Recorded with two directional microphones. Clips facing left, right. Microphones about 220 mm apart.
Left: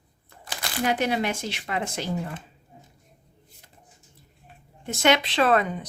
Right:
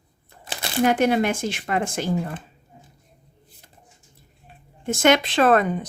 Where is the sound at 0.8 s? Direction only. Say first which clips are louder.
Right 6 dB; 50° right (ahead or behind).